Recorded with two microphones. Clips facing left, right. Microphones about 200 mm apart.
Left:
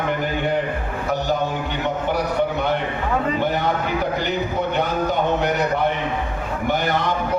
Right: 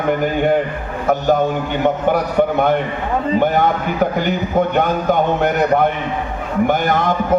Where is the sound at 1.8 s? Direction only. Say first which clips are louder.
Right 7 dB; 50° right (ahead or behind).